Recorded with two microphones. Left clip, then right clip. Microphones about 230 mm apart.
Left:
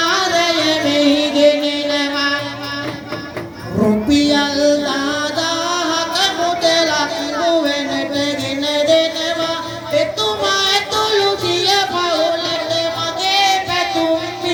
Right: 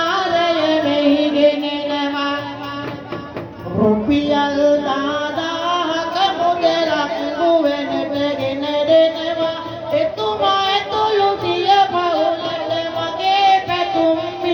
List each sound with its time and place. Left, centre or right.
0.0 s music: left
4.1 s music: left